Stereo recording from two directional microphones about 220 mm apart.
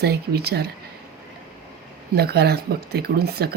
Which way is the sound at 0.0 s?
45° right (ahead or behind).